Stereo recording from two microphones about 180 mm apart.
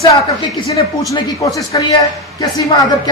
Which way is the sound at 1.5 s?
20° left (ahead or behind).